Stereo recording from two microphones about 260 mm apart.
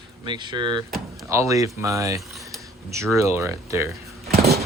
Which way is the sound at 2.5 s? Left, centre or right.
Centre.